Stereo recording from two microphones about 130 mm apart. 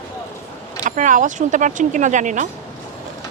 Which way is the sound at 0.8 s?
75° right (ahead or behind).